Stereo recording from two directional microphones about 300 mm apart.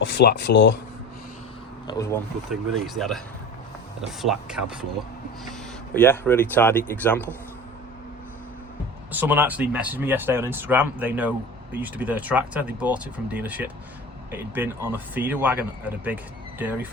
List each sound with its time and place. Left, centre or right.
0.0 s speech: left
1.9 s speech: centre
2.5 s speech: centre
4.2 s speech: centre
5.9 s speech: centre
9.1 s speech: centre